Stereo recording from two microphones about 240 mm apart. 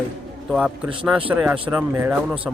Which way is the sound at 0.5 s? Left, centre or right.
Centre.